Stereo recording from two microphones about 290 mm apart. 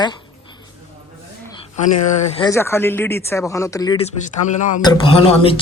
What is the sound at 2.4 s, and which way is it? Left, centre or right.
A man's voice, centre.